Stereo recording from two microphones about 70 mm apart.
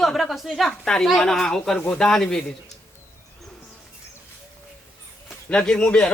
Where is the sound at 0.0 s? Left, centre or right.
Centre.